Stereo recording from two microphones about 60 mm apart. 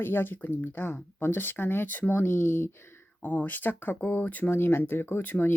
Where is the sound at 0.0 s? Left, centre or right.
Left.